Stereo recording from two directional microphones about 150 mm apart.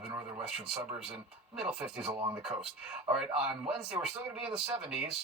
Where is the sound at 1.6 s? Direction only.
5° right (ahead or behind).